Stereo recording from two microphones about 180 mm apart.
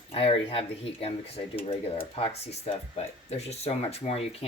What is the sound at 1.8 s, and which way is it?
Speech, 30° left (ahead or behind).